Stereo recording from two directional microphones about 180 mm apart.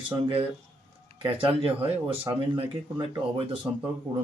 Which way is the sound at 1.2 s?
30° right (ahead or behind).